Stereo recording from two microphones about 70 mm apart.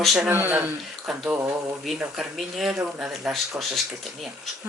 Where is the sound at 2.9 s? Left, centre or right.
Centre.